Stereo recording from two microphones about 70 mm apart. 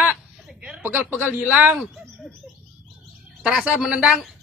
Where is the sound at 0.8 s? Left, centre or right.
Right.